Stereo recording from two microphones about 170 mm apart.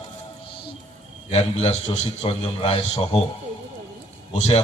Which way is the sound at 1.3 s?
40° left (ahead or behind).